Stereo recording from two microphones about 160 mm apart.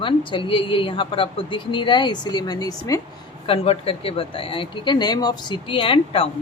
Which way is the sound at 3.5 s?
35° left (ahead or behind).